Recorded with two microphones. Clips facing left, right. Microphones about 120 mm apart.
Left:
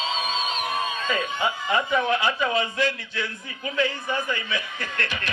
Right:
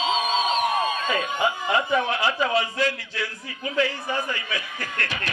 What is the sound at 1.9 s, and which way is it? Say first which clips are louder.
Speech: even; 30° right (ahead or behind).